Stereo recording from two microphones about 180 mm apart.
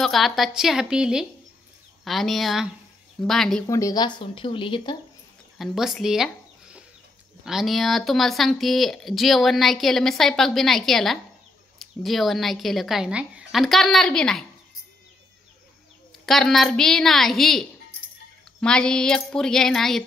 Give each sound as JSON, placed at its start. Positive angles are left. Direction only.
{"t": 0.0, "sound": "speech", "side_deg": 0}
{"t": 3.6, "sound": "speech", "side_deg": 20}
{"t": 5.6, "sound": "speech", "side_deg": 0}
{"t": 16.3, "sound": "speech", "side_deg": 0}